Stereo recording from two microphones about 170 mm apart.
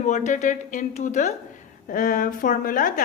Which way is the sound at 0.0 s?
45° left (ahead or behind).